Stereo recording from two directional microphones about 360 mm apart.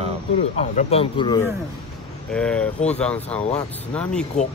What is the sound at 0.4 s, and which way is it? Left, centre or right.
Speech, centre.